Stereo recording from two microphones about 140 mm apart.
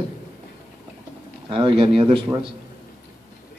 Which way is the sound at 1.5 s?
40° right (ahead or behind).